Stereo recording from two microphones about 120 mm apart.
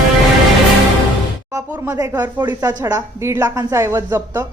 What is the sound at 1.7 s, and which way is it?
A woman's voice, 20° right (ahead or behind).